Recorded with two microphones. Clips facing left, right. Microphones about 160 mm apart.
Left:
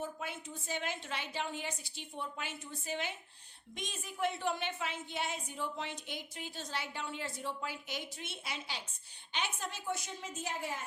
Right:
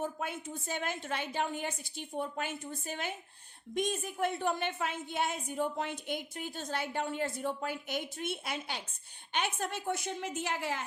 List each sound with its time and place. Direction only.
0.0 s a woman's voice: 50° right (ahead or behind); by 10.8 s 85° right